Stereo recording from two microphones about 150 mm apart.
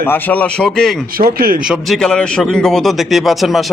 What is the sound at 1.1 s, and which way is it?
Speech, 75° right (ahead or behind).